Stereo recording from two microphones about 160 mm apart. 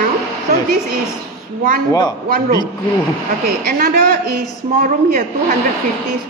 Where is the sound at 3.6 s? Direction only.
65° right (ahead or behind).